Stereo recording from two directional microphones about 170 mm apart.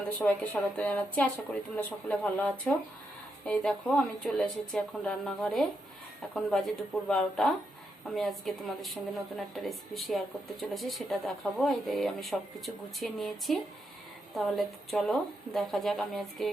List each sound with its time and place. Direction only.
0.2 s speech: 10° left (ahead or behind)